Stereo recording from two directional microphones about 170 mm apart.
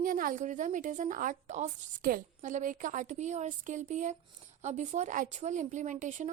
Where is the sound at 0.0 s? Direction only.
50° right (ahead or behind).